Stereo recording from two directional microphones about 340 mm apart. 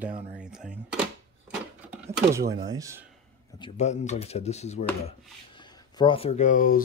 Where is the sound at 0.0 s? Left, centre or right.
Centre.